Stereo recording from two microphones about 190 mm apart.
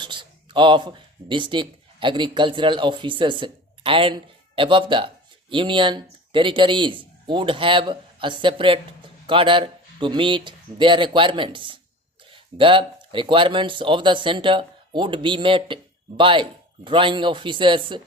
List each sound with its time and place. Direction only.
0.0 s speech: 25° right (ahead or behind)